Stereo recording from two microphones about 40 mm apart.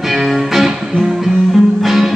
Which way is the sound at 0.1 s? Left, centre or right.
Centre.